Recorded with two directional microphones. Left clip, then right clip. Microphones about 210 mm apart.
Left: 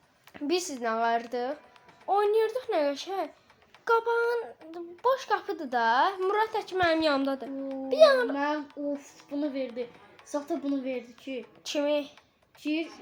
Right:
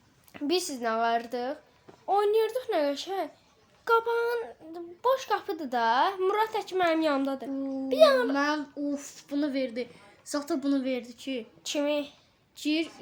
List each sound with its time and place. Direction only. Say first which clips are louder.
0.3 s speech: right 1 dB; 10° right (ahead or behind)
8.3 s a woman's voice: right 2 dB; 50° right (ahead or behind)
11.6 s speech: left 1 dB; 5° right (ahead or behind)
12.5 s a woman's voice: right 2 dB; 50° right (ahead or behind)